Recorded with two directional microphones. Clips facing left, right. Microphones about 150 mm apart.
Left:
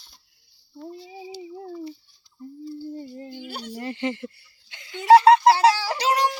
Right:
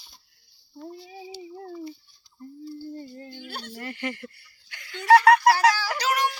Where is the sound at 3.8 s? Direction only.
20° left (ahead or behind).